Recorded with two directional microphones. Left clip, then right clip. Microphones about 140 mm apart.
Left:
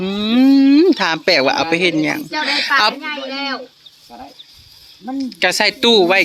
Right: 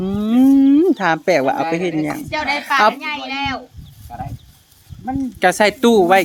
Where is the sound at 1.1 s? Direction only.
10° right (ahead or behind).